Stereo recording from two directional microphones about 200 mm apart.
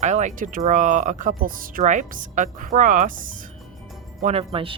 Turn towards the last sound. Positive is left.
turn(degrees=-25)  # may be behind; listen again after turning